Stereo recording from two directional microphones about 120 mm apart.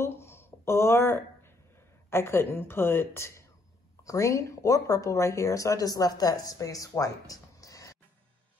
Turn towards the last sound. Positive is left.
turn(degrees=30)  # may be behind; listen again after turning